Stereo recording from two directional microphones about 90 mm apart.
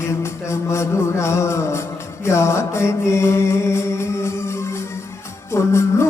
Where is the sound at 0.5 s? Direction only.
30° left (ahead or behind).